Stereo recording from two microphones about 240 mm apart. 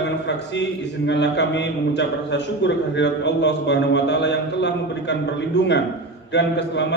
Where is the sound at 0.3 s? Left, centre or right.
Left.